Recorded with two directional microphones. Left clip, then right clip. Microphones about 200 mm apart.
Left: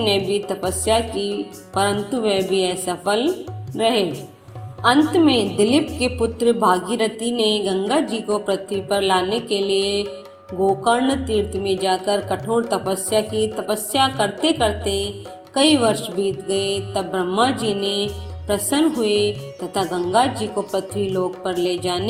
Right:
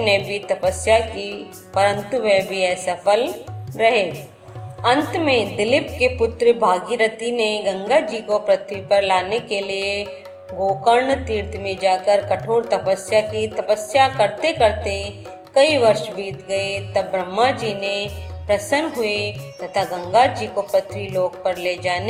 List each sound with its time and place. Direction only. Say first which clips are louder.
0.0 s a woman's voice: right 1 dB; 20° left (ahead or behind)